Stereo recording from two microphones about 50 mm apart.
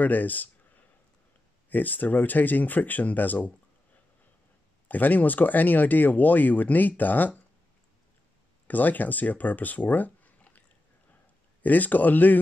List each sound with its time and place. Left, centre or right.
0.0 s a sound: left
1.7 s speech: left
4.8 s speech: left
8.6 s speech: left
11.6 s speech: left